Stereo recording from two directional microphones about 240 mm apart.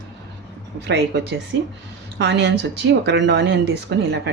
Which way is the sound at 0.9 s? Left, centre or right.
Right.